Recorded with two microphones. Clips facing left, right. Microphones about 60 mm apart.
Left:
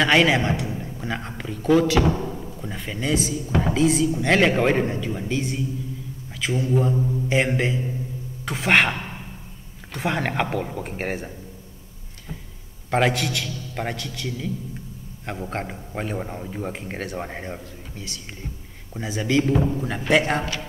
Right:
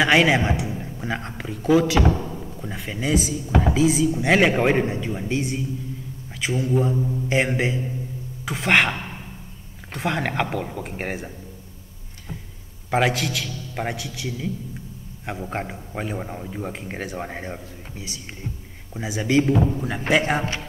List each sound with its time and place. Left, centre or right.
0.0 s a man's voice: centre
0.8 s a sound: centre
1.4 s a man's voice: centre
6.7 s a man's voice: centre
8.5 s a man's voice: centre
12.9 s a man's voice: centre
19.5 s a man's voice: centre